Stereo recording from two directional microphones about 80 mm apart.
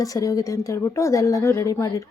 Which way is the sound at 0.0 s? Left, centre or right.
Left.